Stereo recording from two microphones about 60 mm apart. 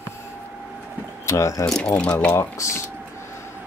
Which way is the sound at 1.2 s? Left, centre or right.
Left.